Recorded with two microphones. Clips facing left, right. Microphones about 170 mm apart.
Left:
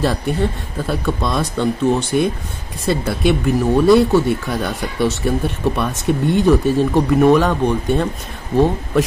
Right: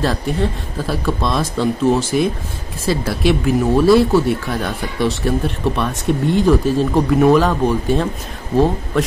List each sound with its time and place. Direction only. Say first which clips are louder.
0.0 s speech: left 1 dB; centre (ahead or behind)